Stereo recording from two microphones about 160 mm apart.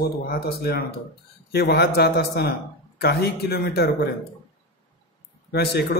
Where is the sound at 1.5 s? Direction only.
90° left.